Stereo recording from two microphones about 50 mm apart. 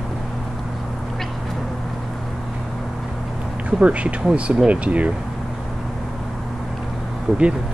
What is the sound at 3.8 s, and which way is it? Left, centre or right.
Speech, right.